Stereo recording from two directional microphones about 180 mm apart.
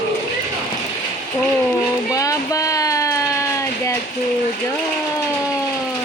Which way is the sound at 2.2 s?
20° left (ahead or behind).